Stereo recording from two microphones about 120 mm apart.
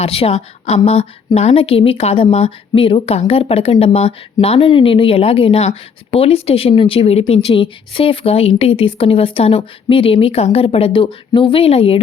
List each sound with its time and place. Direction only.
0.0 s speech: 55° left (ahead or behind)